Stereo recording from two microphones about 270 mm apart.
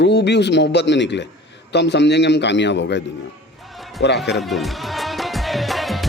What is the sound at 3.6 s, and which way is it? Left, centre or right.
Music, centre.